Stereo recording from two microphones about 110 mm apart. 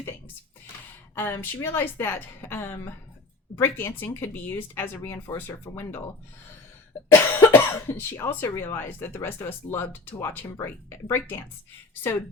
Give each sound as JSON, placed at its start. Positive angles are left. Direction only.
{"t": 1.1, "sound": "speech", "side_deg": 20}
{"t": 7.1, "sound": "speech", "side_deg": 20}